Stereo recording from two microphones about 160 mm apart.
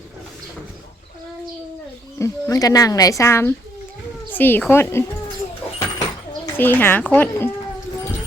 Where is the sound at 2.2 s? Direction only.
20° left (ahead or behind).